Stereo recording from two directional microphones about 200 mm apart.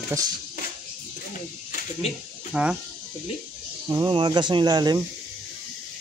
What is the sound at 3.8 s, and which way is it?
Speech, 20° right (ahead or behind).